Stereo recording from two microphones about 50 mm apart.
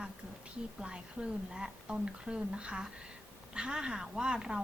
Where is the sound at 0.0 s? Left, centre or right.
Centre.